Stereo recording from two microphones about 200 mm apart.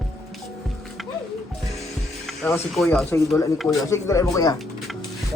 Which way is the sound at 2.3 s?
Centre (ahead or behind).